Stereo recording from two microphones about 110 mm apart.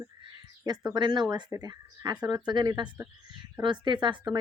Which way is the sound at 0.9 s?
45° right (ahead or behind).